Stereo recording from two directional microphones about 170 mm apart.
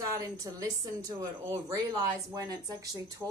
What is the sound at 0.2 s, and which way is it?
Speech, 20° right (ahead or behind).